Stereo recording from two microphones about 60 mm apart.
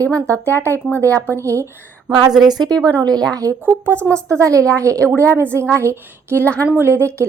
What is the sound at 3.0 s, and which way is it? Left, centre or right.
Speech, right.